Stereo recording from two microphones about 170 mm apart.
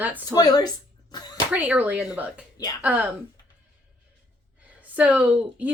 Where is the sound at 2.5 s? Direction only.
20° left (ahead or behind).